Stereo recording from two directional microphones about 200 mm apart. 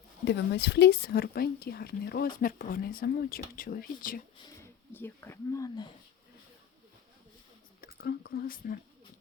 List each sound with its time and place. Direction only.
0.3 s speech: 55° left (ahead or behind)
4.9 s speech: 10° left (ahead or behind)
8.0 s speech: 50° left (ahead or behind)